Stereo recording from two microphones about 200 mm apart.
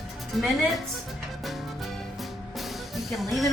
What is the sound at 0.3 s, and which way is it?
Speech, centre (ahead or behind).